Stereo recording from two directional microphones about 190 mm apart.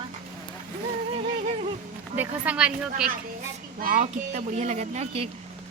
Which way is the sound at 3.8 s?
45° right (ahead or behind).